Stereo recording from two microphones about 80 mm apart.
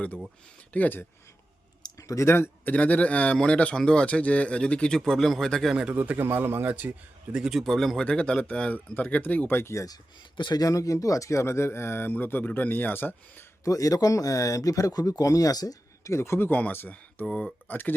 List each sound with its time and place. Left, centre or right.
0.7 s speech: left
2.0 s speech: left
2.3 s speech: left; by 5.7 s centre
5.9 s a man's voice: right
7.3 s a man's voice: centre
8.0 s speech: centre; by 9.8 s left
10.3 s speech: left
10.6 s speech: left
13.7 s speech: left
16.5 s speech: left
17.2 s a man's voice: centre
17.7 s speech: left